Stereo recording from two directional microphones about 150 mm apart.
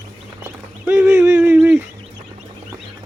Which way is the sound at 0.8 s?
15° right (ahead or behind).